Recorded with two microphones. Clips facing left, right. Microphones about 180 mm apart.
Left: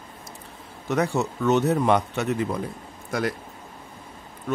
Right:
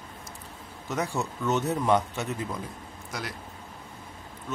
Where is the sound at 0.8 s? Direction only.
65° left (ahead or behind).